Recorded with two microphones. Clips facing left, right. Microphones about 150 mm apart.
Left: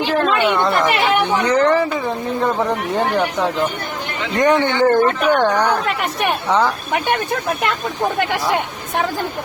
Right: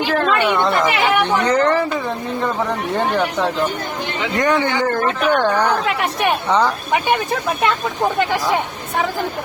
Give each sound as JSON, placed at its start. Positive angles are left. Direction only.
{"t": 0.5, "sound": "a woman's voice", "side_deg": 0}
{"t": 1.2, "sound": "a woman's voice", "side_deg": 10}
{"t": 4.4, "sound": "speech", "side_deg": 20}
{"t": 4.8, "sound": "a woman's voice", "side_deg": 10}
{"t": 5.8, "sound": "a woman's voice", "side_deg": 0}